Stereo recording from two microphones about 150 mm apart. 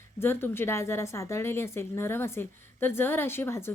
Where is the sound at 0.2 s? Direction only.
15° left (ahead or behind).